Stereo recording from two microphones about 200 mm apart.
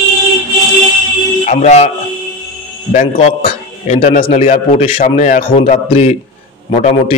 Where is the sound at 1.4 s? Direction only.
35° left (ahead or behind).